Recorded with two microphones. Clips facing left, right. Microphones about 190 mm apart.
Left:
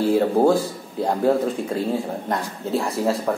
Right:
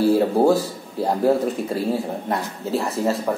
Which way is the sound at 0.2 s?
5° right (ahead or behind).